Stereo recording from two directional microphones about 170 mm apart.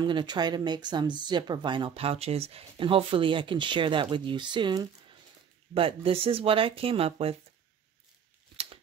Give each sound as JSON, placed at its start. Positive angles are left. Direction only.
{"t": 0.0, "sound": "speech", "side_deg": -25}